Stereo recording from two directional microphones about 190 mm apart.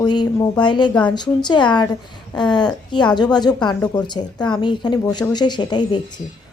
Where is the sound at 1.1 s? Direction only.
25° left (ahead or behind).